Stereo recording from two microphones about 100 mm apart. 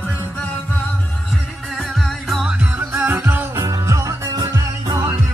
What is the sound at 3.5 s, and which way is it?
Music, 30° right (ahead or behind).